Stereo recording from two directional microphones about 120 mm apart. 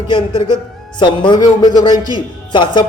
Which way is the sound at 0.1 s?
45° left (ahead or behind).